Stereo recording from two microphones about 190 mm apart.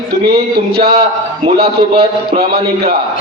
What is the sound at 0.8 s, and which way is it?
A man's voice, 30° right (ahead or behind).